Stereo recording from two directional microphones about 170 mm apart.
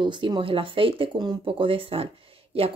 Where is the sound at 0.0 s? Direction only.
30° right (ahead or behind).